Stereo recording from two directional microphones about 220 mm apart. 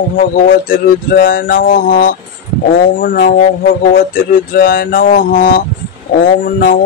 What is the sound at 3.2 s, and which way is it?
Speech, 40° left (ahead or behind).